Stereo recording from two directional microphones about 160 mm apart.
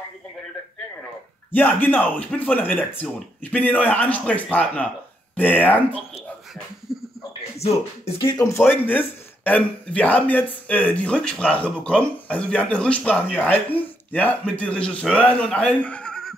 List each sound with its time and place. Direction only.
1.5 s a man's voice: 10° left (ahead or behind)
6.9 s a sound: centre (ahead or behind)
7.5 s speech: 40° left (ahead or behind)
8.5 s a man's voice: 10° left (ahead or behind)